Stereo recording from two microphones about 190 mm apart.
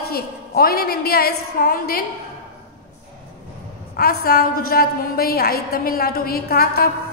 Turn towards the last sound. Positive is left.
turn(degrees=50)  # may be behind; listen again after turning